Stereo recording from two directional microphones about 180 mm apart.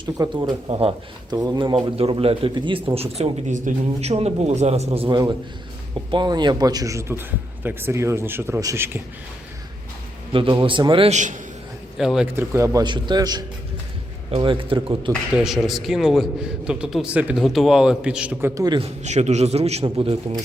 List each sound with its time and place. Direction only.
0.0 s a man's voice: 20° right (ahead or behind)
0.7 s a man's voice: 30° right (ahead or behind)
4.9 s a man's voice: 25° right (ahead or behind)
10.3 s a man's voice: 30° right (ahead or behind)
11.9 s a man's voice: centre (ahead or behind); by 15.1 s 30° right (ahead or behind)
15.4 s a man's voice: centre (ahead or behind); by 18.8 s 20° right (ahead or behind)
18.8 s a man's voice: 40° right (ahead or behind)